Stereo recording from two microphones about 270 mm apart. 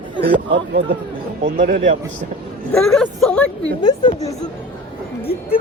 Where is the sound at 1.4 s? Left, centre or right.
Right.